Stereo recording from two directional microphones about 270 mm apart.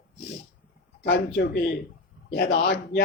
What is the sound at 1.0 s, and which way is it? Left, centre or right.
Speech, left.